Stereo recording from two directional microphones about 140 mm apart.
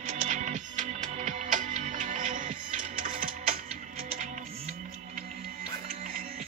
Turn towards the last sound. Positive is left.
turn(degrees=-85)